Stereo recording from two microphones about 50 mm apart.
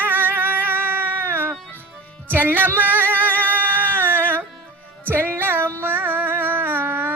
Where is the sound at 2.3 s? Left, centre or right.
Right.